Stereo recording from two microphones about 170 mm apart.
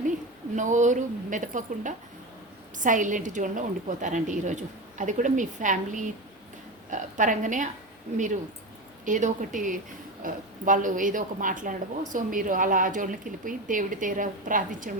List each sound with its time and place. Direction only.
0.5 s a woman's voice: 45° right (ahead or behind)
9.0 s a woman's voice: 50° right (ahead or behind)